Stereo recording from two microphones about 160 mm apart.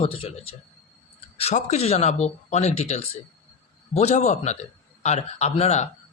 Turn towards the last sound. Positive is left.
turn(degrees=45)  # may be behind; listen again after turning